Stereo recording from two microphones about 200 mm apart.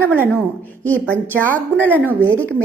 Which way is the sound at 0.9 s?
10° left (ahead or behind).